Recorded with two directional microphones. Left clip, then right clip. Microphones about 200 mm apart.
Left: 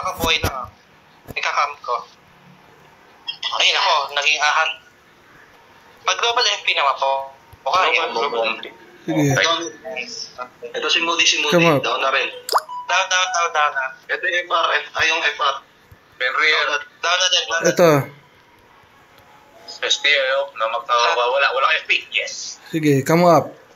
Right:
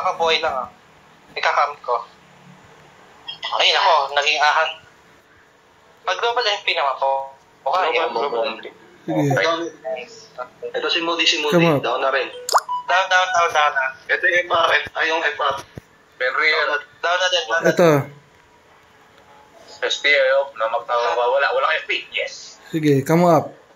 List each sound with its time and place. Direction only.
0.0 s a man's voice: 35° right (ahead or behind)
3.3 s speech: 30° right (ahead or behind)
6.0 s a man's voice: 30° right (ahead or behind)
9.0 s speech: centre (ahead or behind)
9.3 s a man's voice: 35° right (ahead or behind)
11.5 s speech: 5° right (ahead or behind)
11.8 s a man's voice: 30° right (ahead or behind)
12.5 s plop: centre (ahead or behind)
12.8 s speech: 25° right (ahead or behind)
13.5 s a man's voice: 10° right (ahead or behind)
15.0 s a man's voice: 25° right (ahead or behind)
17.6 s speech: 5° left (ahead or behind)
19.8 s speech: 30° right (ahead or behind)
22.6 s speech: centre (ahead or behind)